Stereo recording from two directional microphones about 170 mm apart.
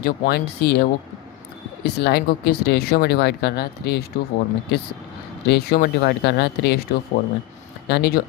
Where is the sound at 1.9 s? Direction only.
75° left (ahead or behind).